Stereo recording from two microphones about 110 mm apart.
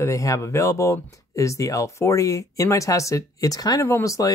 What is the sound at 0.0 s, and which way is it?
Speech, 30° left (ahead or behind).